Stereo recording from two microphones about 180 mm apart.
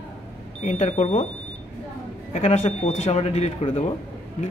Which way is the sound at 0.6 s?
40° left (ahead or behind).